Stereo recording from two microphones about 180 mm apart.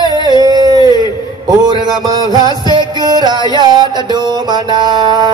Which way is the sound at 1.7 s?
20° right (ahead or behind).